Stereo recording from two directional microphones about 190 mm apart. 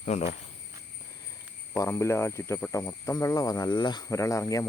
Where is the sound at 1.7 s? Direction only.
15° left (ahead or behind).